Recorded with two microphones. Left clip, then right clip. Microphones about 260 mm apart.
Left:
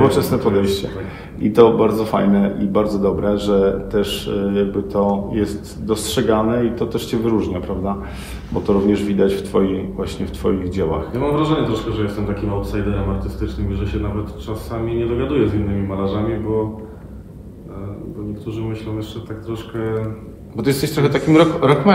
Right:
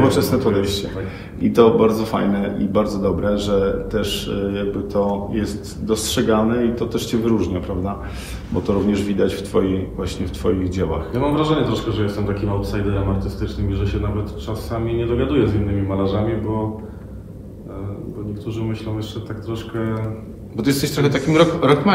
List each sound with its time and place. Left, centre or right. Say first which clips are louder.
0.0 s a man's voice: left 1 dB; left
11.1 s a man's voice: right 1 dB; centre
18.5 s a man's voice: even; centre
20.5 s a man's voice: left 1 dB; left